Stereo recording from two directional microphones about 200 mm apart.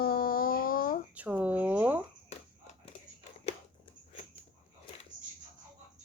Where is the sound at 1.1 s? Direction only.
5° right (ahead or behind).